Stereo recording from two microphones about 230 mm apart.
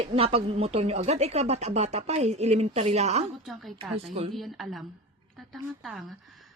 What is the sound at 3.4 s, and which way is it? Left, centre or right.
Speech, centre.